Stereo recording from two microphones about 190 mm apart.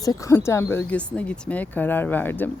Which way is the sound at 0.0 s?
20° left (ahead or behind).